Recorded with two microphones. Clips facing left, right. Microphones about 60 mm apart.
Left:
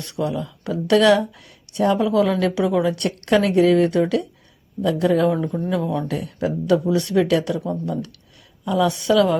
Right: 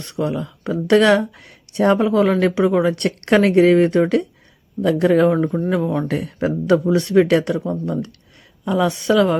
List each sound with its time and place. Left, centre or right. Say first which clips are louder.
0.0 s speech: right 2 dB; right
5.6 s speech: right 3 dB; right
6.1 s speech: right 3 dB; right
7.6 s speech: right 2 dB; right